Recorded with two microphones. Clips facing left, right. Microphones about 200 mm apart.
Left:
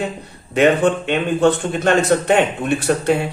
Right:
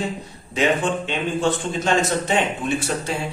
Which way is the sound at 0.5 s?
60° left (ahead or behind).